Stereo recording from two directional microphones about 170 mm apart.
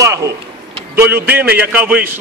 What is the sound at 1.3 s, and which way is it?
Speech, 65° right (ahead or behind).